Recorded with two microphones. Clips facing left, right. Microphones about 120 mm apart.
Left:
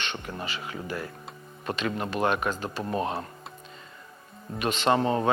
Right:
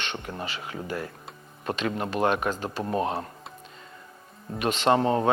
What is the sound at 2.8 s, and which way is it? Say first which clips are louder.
Speech: right 2 dB; 25° right (ahead or behind).